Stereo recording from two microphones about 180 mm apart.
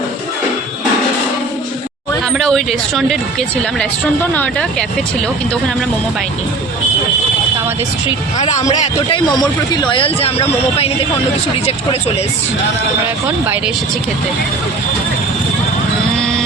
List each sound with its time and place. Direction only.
2.4 s speech: centre (ahead or behind)
8.4 s speech: 40° left (ahead or behind)
9.1 s speech: 25° left (ahead or behind)